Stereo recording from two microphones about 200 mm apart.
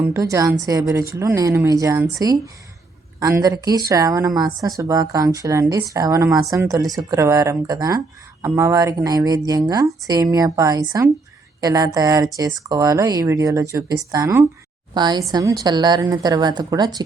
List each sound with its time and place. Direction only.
0.0 s a woman's voice: 15° right (ahead or behind)